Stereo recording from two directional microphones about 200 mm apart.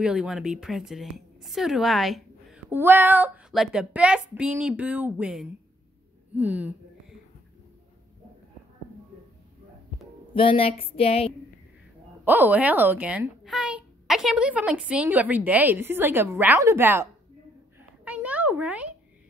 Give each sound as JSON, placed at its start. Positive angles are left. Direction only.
{"t": 0.0, "sound": "a woman's voice", "side_deg": -5}
{"t": 10.3, "sound": "a woman's voice", "side_deg": 25}
{"t": 12.3, "sound": "a child's voice", "side_deg": -10}
{"t": 17.7, "sound": "a sound", "side_deg": -5}